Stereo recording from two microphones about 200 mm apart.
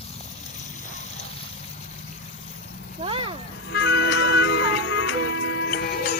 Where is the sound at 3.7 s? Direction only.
65° left (ahead or behind).